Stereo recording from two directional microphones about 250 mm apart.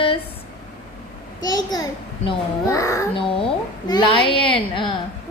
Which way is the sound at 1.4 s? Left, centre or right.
Centre.